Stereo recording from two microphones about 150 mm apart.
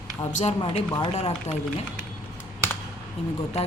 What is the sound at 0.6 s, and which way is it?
Speech, 30° left (ahead or behind).